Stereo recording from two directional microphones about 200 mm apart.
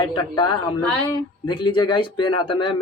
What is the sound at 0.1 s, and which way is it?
Speech, 20° left (ahead or behind).